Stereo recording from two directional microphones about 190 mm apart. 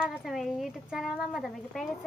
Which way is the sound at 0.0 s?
5° right (ahead or behind).